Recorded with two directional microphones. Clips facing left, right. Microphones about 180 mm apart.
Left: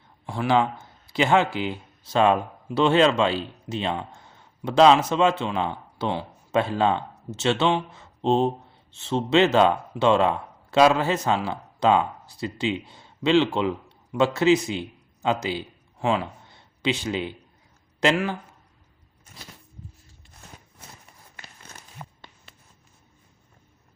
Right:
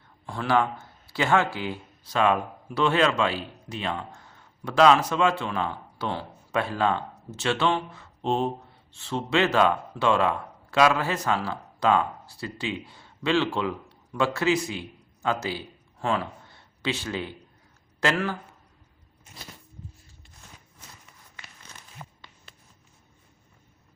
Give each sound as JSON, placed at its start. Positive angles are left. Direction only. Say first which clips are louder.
{"t": 0.3, "sound": "a man's voice", "louder": "left 2 dB", "side_deg": 15}